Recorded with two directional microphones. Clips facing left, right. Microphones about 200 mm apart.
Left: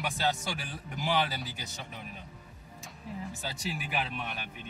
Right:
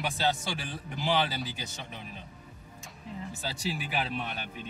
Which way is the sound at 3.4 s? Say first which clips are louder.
Right 5 dB; 30° right (ahead or behind).